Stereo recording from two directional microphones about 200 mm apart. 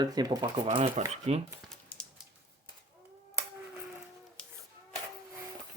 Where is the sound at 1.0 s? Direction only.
35° right (ahead or behind).